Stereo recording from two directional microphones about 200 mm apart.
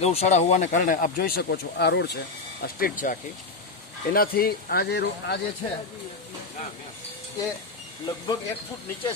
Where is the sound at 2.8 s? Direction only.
45° left (ahead or behind).